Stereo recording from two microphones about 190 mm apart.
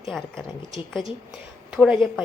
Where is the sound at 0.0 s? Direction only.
Centre (ahead or behind).